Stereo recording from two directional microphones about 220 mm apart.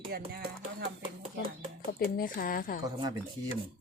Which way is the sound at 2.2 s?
40° left (ahead or behind).